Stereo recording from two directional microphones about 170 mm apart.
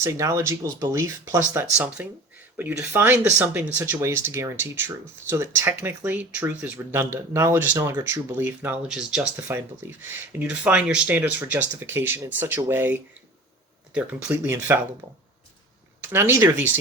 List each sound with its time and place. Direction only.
0.0 s speech: 15° right (ahead or behind)
9.3 s speech: 15° right (ahead or behind)
16.0 s speech: 15° right (ahead or behind)